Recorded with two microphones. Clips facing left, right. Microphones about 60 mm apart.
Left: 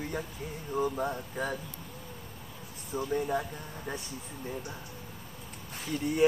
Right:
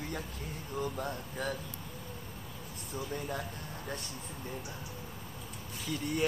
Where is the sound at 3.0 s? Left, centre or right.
Centre.